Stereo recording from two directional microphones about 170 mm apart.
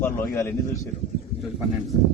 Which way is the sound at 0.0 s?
10° left (ahead or behind).